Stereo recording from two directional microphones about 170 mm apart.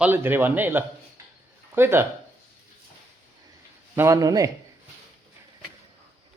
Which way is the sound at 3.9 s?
20° right (ahead or behind).